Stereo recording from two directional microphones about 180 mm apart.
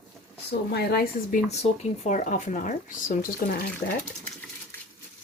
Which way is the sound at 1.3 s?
35° left (ahead or behind).